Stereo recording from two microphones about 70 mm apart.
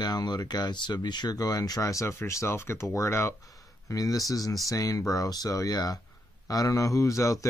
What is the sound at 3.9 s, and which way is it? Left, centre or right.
Speech, left.